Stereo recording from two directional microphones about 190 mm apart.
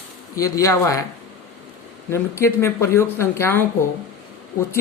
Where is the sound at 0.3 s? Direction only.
20° left (ahead or behind).